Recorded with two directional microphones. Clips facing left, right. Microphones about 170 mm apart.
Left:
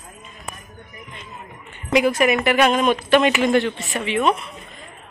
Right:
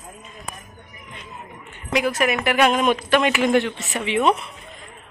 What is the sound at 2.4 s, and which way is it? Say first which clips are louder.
A woman's voice: left 1 dB; 5° right (ahead or behind).